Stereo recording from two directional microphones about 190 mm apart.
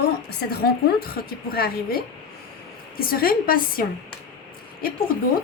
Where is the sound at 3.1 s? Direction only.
50° left (ahead or behind).